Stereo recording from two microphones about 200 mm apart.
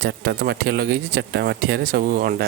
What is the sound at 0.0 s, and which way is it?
Speech, 60° right (ahead or behind).